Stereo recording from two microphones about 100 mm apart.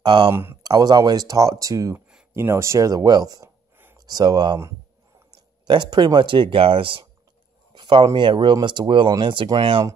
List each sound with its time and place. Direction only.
0.0 s speech: 50° right (ahead or behind)
0.3 s speech: 25° right (ahead or behind)
0.6 s speech: 40° right (ahead or behind)
3.7 s a sound: 20° right (ahead or behind)
4.0 s speech: 40° right (ahead or behind)
5.7 s speech: 50° right (ahead or behind)
7.7 s speech: 50° right (ahead or behind)